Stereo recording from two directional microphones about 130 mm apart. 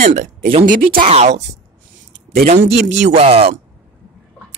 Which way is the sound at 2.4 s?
50° right (ahead or behind).